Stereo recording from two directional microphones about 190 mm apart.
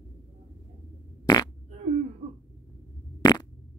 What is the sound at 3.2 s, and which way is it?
Fart, 20° left (ahead or behind).